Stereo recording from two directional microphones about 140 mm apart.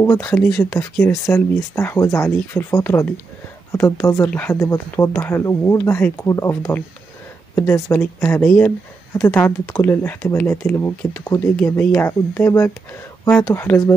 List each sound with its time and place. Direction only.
0.0 s speech: 15° left (ahead or behind)